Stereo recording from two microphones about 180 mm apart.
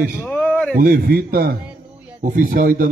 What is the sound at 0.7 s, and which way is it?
A man's voice, 55° right (ahead or behind).